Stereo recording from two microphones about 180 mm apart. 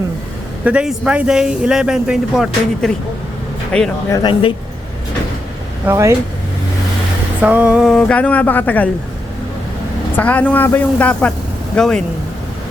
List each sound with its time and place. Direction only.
0.6 s a man's voice: 5° right (ahead or behind)
4.1 s speech: 25° left (ahead or behind)
5.8 s speech: 15° right (ahead or behind)
7.4 s speech: 10° right (ahead or behind); by 8.9 s 10° left (ahead or behind)
10.2 s speech: 10° left (ahead or behind)